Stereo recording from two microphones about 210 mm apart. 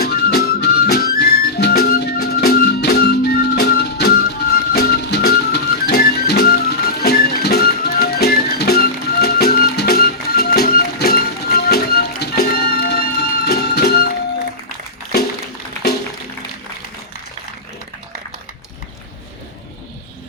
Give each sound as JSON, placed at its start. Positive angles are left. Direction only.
{"t": 0.0, "sound": "music", "side_deg": 50}